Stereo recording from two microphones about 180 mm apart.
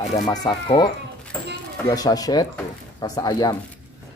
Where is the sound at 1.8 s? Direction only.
20° left (ahead or behind).